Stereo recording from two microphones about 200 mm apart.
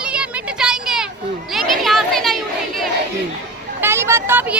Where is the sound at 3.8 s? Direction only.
10° right (ahead or behind).